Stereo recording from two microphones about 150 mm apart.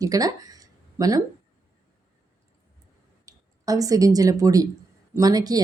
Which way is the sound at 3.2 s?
25° right (ahead or behind).